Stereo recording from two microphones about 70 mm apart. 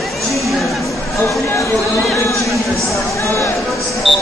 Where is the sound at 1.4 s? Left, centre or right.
Left.